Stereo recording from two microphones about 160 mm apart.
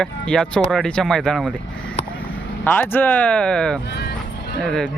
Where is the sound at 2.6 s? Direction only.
10° left (ahead or behind).